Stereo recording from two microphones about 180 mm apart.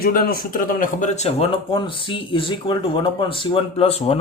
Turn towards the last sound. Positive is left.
turn(degrees=35)  # may be behind; listen again after turning